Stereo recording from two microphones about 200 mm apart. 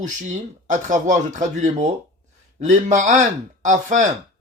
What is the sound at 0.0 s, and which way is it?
Speech, 35° right (ahead or behind).